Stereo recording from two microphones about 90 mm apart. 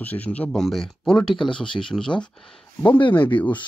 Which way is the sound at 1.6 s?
70° left (ahead or behind).